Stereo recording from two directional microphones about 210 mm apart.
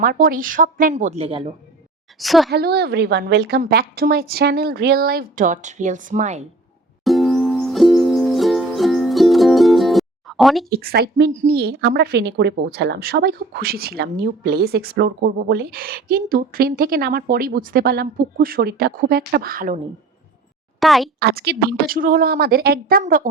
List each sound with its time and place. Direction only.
0.0 s speech: 45° right (ahead or behind); by 1.5 s 25° right (ahead or behind)
2.1 s a woman's voice: centre (ahead or behind)
2.5 s a woman's voice: 50° right (ahead or behind)
7.0 s music: centre (ahead or behind)
10.7 s a woman's voice: 45° right (ahead or behind)
20.7 s speech: centre (ahead or behind)
21.2 s a woman's voice: 50° right (ahead or behind)